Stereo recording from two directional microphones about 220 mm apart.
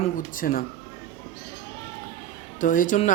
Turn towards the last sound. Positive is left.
turn(degrees=35)  # may be behind; listen again after turning